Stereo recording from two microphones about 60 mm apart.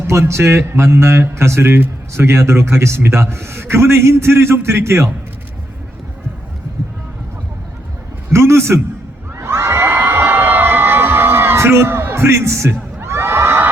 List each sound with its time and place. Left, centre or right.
0.1 s a man's voice: right
8.3 s a man's voice: right
9.4 s crowd: right